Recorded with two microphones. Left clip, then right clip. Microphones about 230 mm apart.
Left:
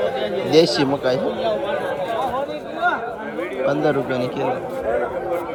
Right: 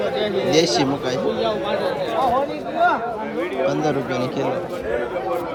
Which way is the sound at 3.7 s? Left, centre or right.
Centre.